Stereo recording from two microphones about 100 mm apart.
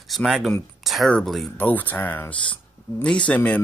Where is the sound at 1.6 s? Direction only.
15° left (ahead or behind).